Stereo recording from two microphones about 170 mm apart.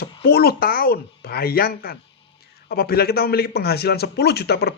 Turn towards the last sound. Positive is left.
turn(degrees=70)  # may be behind; listen again after turning